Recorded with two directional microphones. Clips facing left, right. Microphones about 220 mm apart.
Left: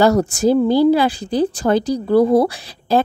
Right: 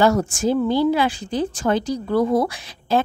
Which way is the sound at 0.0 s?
35° left (ahead or behind).